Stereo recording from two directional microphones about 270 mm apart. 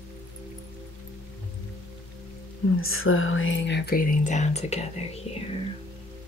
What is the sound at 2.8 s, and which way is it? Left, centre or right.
Speech, left.